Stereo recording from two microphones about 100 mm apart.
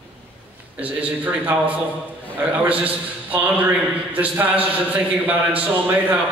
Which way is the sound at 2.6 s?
15° right (ahead or behind).